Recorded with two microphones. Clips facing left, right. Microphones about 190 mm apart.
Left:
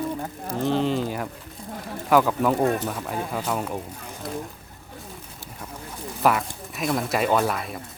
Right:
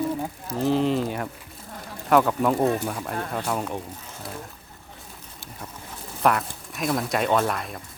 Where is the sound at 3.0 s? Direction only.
5° left (ahead or behind).